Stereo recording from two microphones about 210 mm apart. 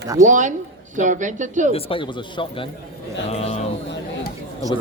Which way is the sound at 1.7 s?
25° left (ahead or behind).